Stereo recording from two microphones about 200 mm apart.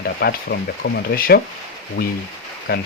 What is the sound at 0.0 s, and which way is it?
Speech, 55° left (ahead or behind).